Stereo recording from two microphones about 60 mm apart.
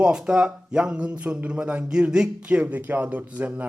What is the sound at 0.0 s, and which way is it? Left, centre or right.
Speech, centre.